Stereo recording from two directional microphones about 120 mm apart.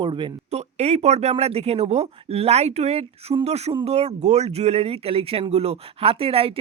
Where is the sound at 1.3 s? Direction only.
55° right (ahead or behind).